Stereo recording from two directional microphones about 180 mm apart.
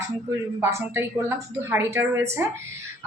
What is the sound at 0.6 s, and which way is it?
Speech, 15° right (ahead or behind).